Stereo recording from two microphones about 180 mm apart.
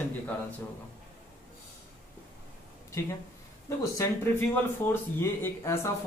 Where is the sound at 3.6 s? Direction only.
15° left (ahead or behind).